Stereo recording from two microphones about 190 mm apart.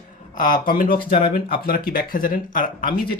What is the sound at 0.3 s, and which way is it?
Speech, 45° left (ahead or behind).